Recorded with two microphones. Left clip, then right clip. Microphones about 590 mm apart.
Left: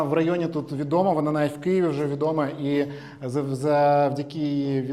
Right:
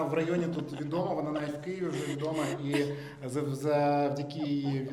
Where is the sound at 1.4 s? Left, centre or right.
Left.